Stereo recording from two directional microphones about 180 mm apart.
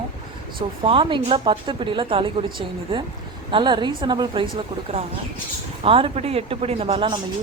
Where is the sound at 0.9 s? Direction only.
30° right (ahead or behind).